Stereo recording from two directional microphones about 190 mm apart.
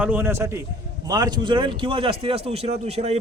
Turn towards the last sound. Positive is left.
turn(degrees=-35)  # may be behind; listen again after turning